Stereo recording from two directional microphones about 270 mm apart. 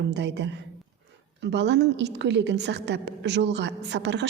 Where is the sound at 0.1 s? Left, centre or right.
Right.